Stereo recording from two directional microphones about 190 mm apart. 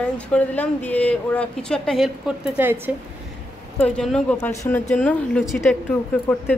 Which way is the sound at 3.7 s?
5° left (ahead or behind).